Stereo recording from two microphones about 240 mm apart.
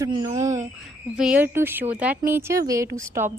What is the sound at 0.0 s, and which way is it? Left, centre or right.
A woman's voice, centre.